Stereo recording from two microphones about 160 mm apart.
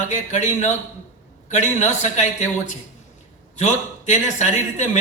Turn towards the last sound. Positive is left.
turn(degrees=45)  # may be behind; listen again after turning